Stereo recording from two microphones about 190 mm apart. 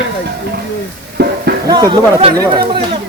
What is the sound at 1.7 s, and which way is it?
Speech, 25° right (ahead or behind).